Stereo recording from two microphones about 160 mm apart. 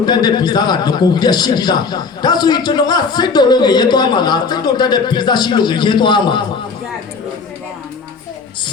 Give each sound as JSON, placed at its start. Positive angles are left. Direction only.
{"t": 0.0, "sound": "a man's voice", "side_deg": 25}